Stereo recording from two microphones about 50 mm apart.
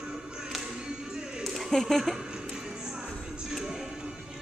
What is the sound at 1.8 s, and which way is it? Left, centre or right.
Speech, centre.